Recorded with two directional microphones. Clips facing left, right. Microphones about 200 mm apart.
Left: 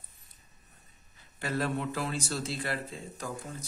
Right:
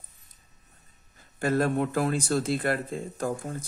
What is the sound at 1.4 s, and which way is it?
Speech, 50° right (ahead or behind).